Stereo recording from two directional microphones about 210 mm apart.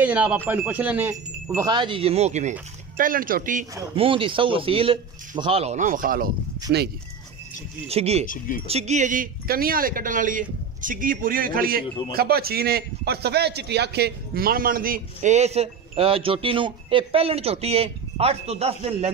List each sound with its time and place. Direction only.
0.0 s a man's voice: 5° right (ahead or behind); by 3.6 s 40° right (ahead or behind)
3.9 s speech: 25° right (ahead or behind); by 6.3 s 40° right (ahead or behind)
7.9 s speech: 30° right (ahead or behind)
8.3 s speech: 40° left (ahead or behind)
8.6 s a man's voice: 30° right (ahead or behind)